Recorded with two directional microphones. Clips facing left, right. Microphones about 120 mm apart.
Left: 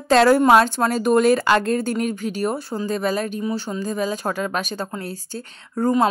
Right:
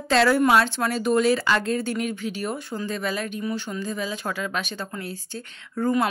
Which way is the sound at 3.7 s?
40° left (ahead or behind).